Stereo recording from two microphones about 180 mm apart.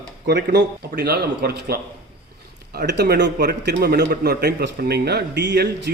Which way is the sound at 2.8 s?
65° right (ahead or behind).